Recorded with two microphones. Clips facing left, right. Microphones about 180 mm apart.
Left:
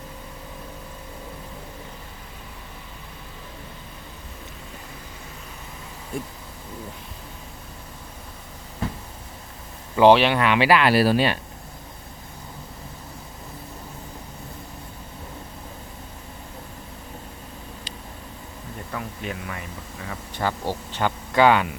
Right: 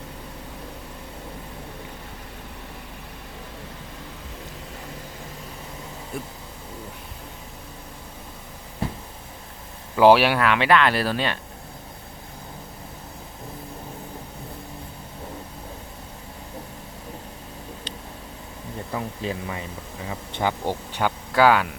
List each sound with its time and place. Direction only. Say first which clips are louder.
9.9 s speech: even; 5° right (ahead or behind)
18.9 s speech: right 3 dB; 25° right (ahead or behind)
21.3 s speech: even; centre (ahead or behind)